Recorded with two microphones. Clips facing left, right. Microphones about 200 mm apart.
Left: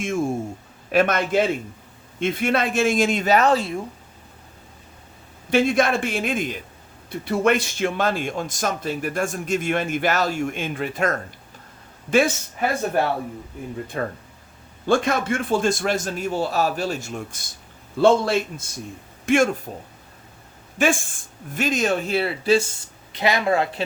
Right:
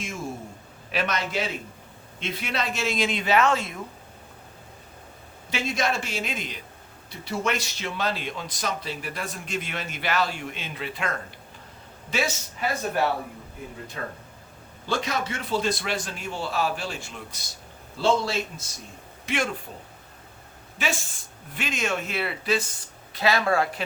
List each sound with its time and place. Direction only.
0.0 s speech: 50° left (ahead or behind); by 3.8 s 35° left (ahead or behind)
5.5 s speech: 55° left (ahead or behind)
14.0 s speech: 55° left (ahead or behind)
20.7 s speech: 50° left (ahead or behind); by 22.6 s 30° left (ahead or behind)
23.1 s speech: 20° left (ahead or behind)